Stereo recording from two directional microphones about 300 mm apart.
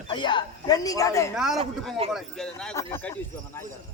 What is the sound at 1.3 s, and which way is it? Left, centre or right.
A man's voice, centre.